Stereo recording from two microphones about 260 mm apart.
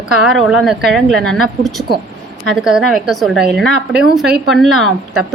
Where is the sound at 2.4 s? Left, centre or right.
Centre.